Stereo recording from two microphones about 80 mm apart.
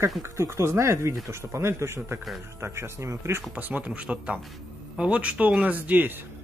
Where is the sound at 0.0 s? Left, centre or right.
Right.